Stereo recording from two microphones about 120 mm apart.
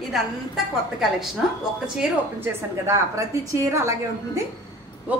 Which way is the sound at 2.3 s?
25° right (ahead or behind).